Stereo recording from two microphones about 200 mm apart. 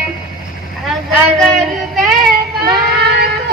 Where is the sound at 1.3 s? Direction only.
Centre (ahead or behind).